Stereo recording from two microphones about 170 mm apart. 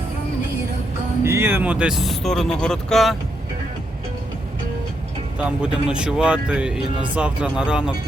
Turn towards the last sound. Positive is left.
turn(degrees=-5)  # may be behind; listen again after turning